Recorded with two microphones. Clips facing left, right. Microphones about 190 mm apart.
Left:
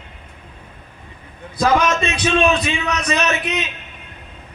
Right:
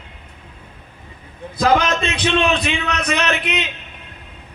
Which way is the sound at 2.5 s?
60° right (ahead or behind).